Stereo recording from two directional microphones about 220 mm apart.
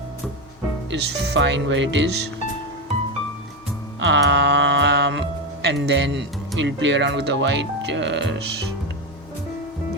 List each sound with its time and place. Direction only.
0.9 s speech: 50° right (ahead or behind)
4.0 s music: 50° right (ahead or behind)
5.6 s speech: 50° right (ahead or behind)